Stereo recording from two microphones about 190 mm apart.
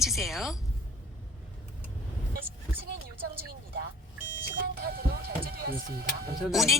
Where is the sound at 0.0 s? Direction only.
Centre (ahead or behind).